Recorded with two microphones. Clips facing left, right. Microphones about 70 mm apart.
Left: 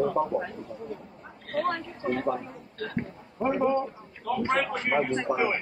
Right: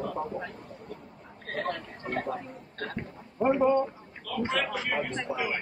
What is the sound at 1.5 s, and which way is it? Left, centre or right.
Speech, right.